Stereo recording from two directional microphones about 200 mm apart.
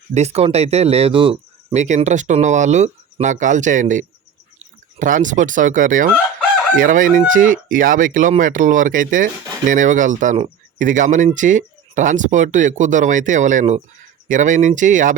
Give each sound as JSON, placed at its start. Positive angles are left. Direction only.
{"t": 0.1, "sound": "speech", "side_deg": -35}